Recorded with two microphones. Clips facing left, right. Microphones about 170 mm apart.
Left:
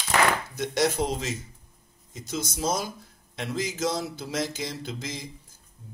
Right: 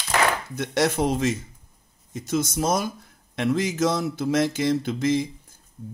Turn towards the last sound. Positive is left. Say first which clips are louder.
# right 13 dB
turn(degrees=-55)  # may be behind; listen again after turning